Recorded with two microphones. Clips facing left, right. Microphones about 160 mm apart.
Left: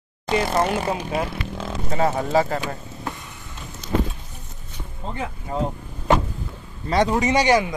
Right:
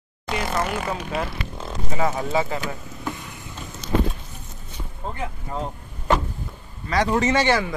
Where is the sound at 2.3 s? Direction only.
40° left (ahead or behind).